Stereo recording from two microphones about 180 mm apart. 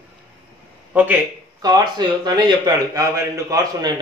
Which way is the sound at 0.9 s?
10° right (ahead or behind).